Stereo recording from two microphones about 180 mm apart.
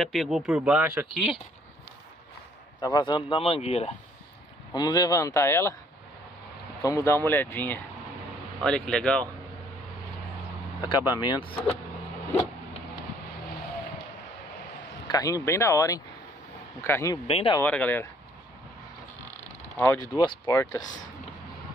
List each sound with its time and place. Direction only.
0.0 s speech: centre (ahead or behind)
2.8 s speech: 25° left (ahead or behind)
4.7 s speech: 20° left (ahead or behind)
6.8 s speech: 15° left (ahead or behind)
10.8 s speech: 25° left (ahead or behind)
15.0 s speech: 20° left (ahead or behind)
17.3 s speech: 30° left (ahead or behind)
17.6 s speech: 10° left (ahead or behind)
19.8 s speech: 15° left (ahead or behind)